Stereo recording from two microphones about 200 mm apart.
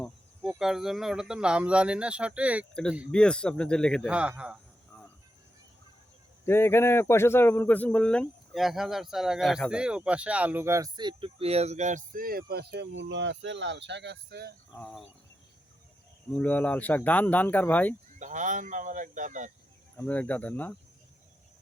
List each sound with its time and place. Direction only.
0.0 s speech: centre (ahead or behind)
3.1 s a man's voice: 5° left (ahead or behind)
6.4 s speech: 10° left (ahead or behind); by 14.5 s 55° right (ahead or behind)
14.8 s a man's voice: 5° left (ahead or behind)
16.3 s speech: 10° left (ahead or behind)
18.2 s speech: 40° right (ahead or behind)
20.0 s speech: 5° left (ahead or behind)